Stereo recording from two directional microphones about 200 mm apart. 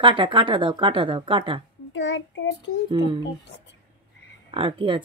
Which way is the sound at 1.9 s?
65° left (ahead or behind).